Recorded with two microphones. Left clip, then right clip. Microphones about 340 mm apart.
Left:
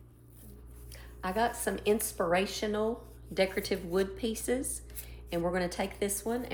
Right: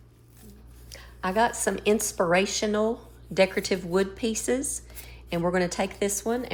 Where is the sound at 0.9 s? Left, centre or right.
Right.